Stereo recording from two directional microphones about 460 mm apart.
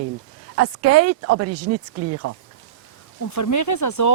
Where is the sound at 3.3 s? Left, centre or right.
Left.